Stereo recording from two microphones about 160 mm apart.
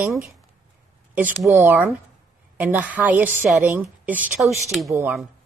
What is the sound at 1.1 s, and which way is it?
A woman's voice, 10° right (ahead or behind).